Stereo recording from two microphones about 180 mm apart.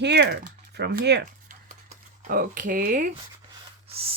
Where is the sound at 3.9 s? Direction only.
35° right (ahead or behind).